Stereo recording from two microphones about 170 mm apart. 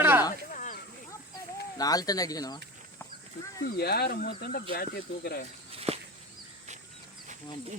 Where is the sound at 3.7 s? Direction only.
70° left (ahead or behind).